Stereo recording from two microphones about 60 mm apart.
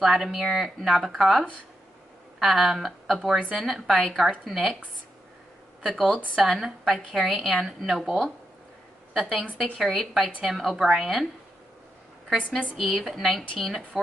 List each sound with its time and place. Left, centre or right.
0.0 s a woman's voice: centre
3.3 s a woman's voice: centre
3.6 s speech: centre
5.8 s a woman's voice: centre
12.7 s speech: centre